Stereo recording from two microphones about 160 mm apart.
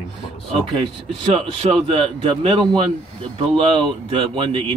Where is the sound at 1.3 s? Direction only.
35° right (ahead or behind).